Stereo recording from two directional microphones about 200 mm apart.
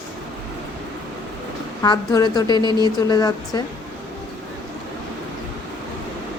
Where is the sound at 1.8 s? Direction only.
20° left (ahead or behind).